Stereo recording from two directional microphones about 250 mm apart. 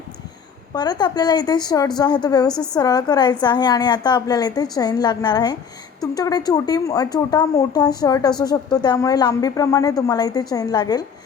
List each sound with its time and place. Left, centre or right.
0.7 s speech: centre